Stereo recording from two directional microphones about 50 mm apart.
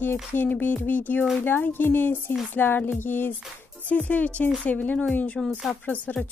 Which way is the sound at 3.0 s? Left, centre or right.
Left.